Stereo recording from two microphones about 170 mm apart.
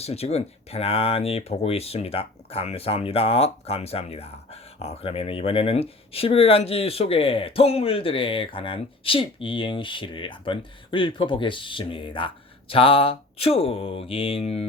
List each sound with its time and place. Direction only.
0.0 s speech: 35° left (ahead or behind)